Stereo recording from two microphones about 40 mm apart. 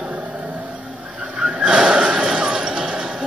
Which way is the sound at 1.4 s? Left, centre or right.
Right.